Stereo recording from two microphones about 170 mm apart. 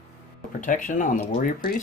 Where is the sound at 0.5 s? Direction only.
50° left (ahead or behind).